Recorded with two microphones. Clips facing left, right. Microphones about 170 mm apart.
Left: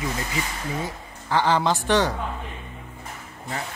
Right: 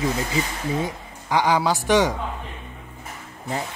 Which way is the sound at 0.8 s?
15° right (ahead or behind).